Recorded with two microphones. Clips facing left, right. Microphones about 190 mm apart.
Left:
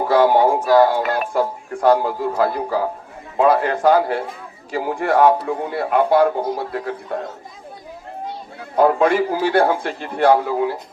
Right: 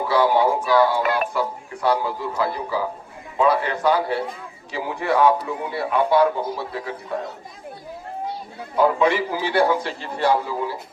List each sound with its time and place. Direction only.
0.0 s speech: 50° left (ahead or behind)
8.7 s speech: 50° left (ahead or behind)